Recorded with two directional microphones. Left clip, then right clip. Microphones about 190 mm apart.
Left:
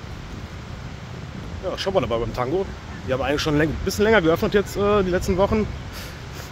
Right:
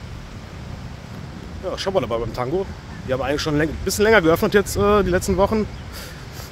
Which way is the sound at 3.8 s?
20° right (ahead or behind).